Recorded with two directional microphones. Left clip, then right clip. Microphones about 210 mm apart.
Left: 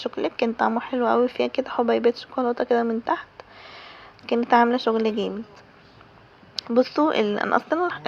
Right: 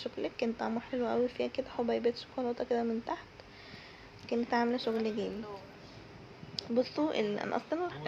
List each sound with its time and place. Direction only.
0.0 s speech: 30° left (ahead or behind)
6.6 s speech: 30° left (ahead or behind)